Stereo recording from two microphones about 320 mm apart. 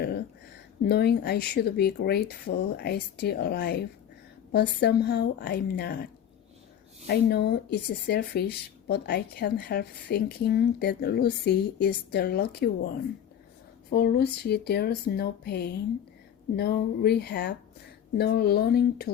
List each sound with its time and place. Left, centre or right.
0.9 s speech: left
7.1 s speech: left
13.9 s speech: left